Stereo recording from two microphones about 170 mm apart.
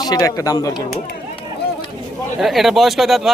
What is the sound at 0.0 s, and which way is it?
Speech, 20° left (ahead or behind).